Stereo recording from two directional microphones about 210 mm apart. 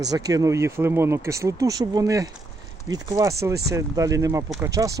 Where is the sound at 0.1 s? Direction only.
15° right (ahead or behind).